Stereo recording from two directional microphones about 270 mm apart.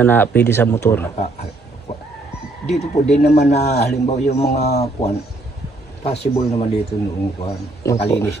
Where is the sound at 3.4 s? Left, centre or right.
Left.